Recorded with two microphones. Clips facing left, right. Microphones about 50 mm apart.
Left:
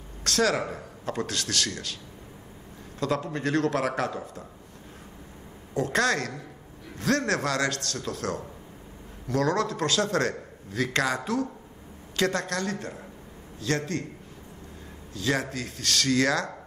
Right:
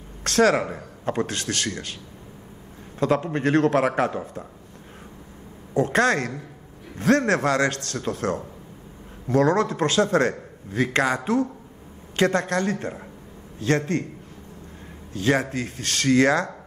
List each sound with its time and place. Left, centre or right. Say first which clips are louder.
0.2 s a man's voice: right 6 dB; right
3.0 s a man's voice: right 6 dB; right
5.8 s a man's voice: right 5 dB; right
15.1 s a man's voice: right 6 dB; right